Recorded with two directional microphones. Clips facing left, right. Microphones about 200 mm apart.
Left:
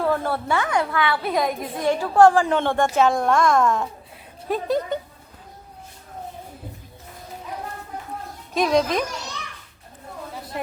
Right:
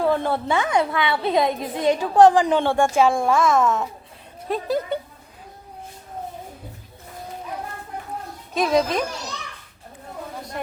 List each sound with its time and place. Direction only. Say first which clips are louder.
0.0 s a woman's voice: right 2 dB; 20° right (ahead or behind); by 4.9 s centre (ahead or behind)
8.5 s speech: even; centre (ahead or behind)